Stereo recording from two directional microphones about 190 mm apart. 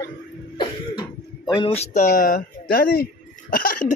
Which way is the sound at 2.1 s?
50° left (ahead or behind).